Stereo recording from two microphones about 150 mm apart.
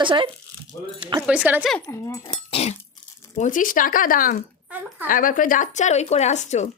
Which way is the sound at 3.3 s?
60° left (ahead or behind).